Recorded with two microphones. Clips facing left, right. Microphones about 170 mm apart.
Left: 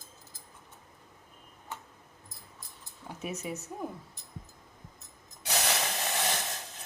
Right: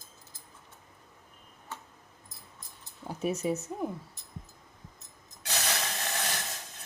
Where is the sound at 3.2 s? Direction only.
35° right (ahead or behind).